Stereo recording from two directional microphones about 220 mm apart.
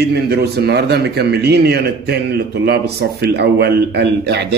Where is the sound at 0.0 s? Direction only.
45° right (ahead or behind).